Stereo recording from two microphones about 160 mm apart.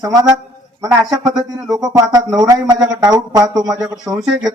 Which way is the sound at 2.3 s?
25° right (ahead or behind).